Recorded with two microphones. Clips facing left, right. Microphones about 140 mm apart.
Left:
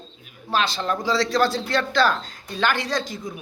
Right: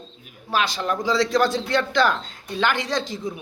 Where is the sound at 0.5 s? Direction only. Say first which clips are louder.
Even; 15° right (ahead or behind).